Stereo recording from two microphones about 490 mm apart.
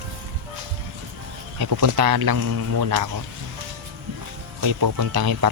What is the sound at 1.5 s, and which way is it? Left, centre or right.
Speech, right.